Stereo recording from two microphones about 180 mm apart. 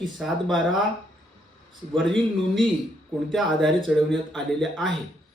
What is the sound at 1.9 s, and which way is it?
Speech, centre (ahead or behind).